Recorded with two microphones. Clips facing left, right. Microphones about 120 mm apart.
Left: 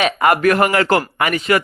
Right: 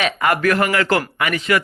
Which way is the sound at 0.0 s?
30° left (ahead or behind).